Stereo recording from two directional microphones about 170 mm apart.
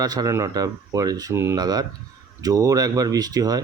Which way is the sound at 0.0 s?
20° right (ahead or behind).